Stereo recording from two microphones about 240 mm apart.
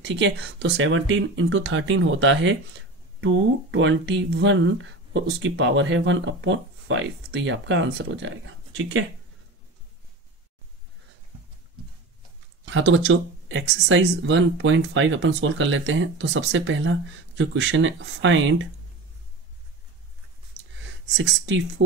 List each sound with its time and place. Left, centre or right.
0.0 s speech: right
12.6 s speech: right
21.1 s speech: right